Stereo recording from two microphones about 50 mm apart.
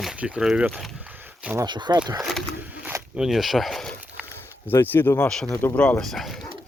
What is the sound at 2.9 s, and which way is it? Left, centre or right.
Zipper, right.